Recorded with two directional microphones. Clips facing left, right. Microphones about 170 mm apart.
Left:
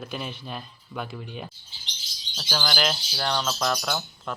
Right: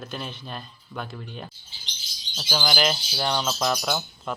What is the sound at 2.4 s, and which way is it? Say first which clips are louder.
Speech: right 2 dB; 5° right (ahead or behind).